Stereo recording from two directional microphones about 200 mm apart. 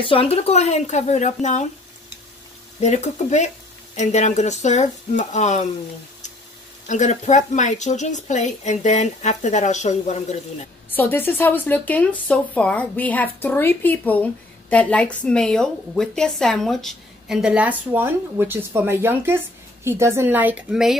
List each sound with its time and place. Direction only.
0.1 s a woman's voice: 30° left (ahead or behind)
2.8 s a woman's voice: 35° left (ahead or behind)
6.9 s a woman's voice: 35° left (ahead or behind)
11.0 s speech: 10° left (ahead or behind); by 20.9 s 5° right (ahead or behind)